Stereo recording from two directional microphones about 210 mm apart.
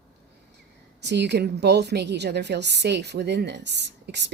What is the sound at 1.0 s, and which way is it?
A woman's voice, 55° right (ahead or behind).